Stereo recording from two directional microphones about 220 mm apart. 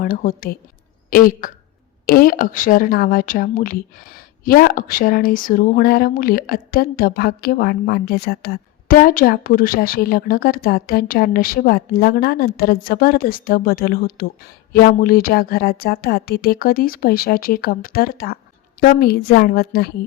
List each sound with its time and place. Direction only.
0.0 s a woman's voice: 40° left (ahead or behind)